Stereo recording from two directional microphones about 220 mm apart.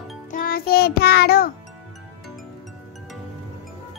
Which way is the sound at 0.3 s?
40° left (ahead or behind).